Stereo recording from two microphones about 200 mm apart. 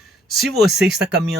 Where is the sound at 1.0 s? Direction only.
55° right (ahead or behind).